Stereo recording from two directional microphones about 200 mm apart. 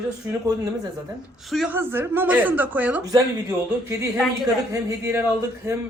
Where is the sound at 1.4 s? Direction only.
Centre (ahead or behind).